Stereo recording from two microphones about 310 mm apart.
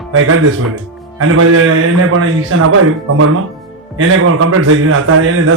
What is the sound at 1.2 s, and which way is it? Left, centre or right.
A man's voice, right.